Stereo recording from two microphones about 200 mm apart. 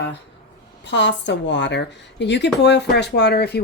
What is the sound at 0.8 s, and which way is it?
Speech, 65° left (ahead or behind).